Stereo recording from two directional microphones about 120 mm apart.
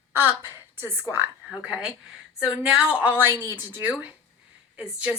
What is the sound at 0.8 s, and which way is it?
Speech, 20° right (ahead or behind).